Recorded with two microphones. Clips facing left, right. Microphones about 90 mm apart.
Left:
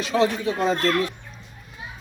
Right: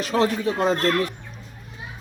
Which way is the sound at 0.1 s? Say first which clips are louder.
Even; 40° right (ahead or behind).